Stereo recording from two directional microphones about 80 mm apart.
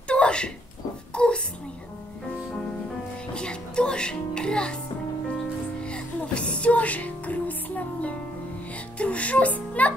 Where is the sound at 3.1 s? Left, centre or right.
Centre.